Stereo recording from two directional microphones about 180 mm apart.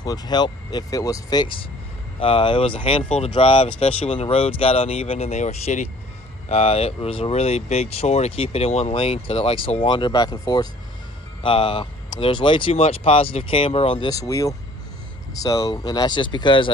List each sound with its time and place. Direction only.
0.0 s speech: 25° left (ahead or behind)